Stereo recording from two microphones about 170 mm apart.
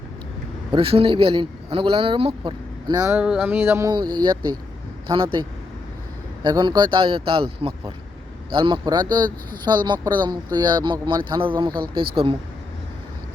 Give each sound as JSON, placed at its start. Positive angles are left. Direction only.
{"t": 0.7, "sound": "speech", "side_deg": -35}
{"t": 3.2, "sound": "speech", "side_deg": -5}
{"t": 6.4, "sound": "speech", "side_deg": -25}